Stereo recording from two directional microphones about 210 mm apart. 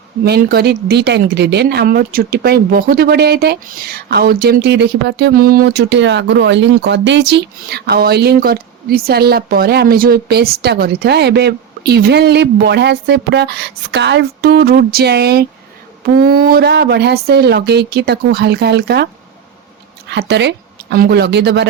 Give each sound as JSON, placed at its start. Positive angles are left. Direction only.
{"t": 0.3, "sound": "speech", "side_deg": -50}
{"t": 20.1, "sound": "a woman's voice", "side_deg": -55}